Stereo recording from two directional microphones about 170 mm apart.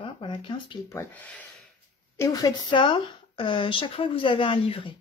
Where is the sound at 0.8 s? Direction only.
10° left (ahead or behind).